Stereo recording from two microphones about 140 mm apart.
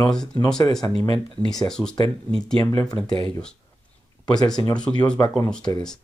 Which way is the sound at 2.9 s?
5° left (ahead or behind).